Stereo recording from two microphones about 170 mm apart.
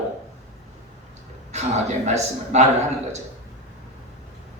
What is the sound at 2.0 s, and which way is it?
Speech, 40° right (ahead or behind).